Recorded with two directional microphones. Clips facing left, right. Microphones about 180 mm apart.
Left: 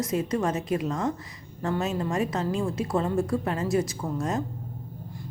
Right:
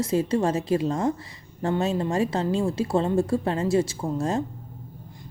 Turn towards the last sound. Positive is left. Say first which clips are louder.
# right 3 dB
turn(degrees=-30)  # may be behind; listen again after turning